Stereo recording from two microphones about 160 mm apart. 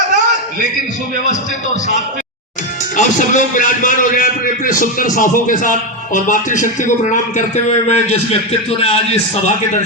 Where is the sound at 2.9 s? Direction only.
55° left (ahead or behind).